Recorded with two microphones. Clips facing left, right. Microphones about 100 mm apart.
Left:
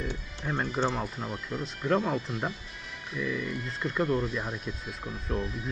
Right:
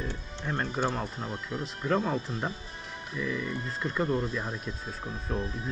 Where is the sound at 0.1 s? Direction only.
10° left (ahead or behind).